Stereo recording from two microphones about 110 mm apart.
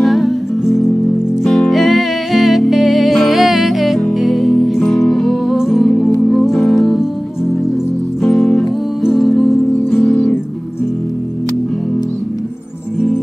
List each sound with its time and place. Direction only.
0.0 s music: centre (ahead or behind)
8.2 s music: centre (ahead or behind)